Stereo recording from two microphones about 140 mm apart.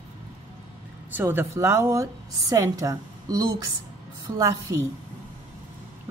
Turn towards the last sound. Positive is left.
turn(degrees=-25)  # may be behind; listen again after turning